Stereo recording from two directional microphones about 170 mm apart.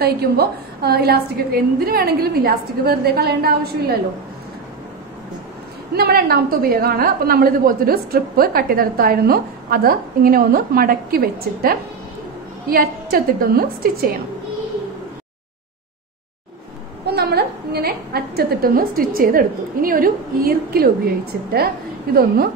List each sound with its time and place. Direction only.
0.0 s a woman's voice: 65° right (ahead or behind)
5.9 s a woman's voice: 65° right (ahead or behind)
17.0 s a woman's voice: 70° right (ahead or behind)